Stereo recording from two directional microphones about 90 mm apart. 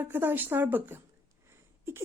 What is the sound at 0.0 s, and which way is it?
A woman's voice, 20° right (ahead or behind).